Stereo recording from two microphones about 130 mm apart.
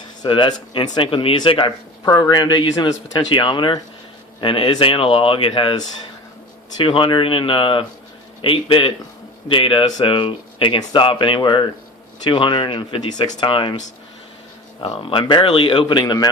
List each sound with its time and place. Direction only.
0.2 s speech: 40° left (ahead or behind)
15.0 s speech: 40° left (ahead or behind)